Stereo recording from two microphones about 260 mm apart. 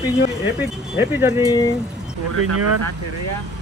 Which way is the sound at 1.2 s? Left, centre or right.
Centre.